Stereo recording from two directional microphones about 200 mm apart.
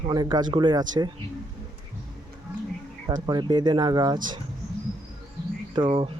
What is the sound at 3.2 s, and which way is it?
Speech, 20° right (ahead or behind).